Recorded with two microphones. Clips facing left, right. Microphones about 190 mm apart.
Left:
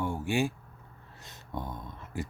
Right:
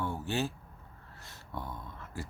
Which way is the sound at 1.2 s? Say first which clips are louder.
Left 3 dB; 20° left (ahead or behind).